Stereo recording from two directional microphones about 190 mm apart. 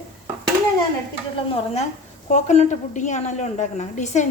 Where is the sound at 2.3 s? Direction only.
40° left (ahead or behind).